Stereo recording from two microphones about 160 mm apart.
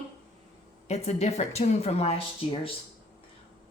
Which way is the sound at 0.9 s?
40° left (ahead or behind).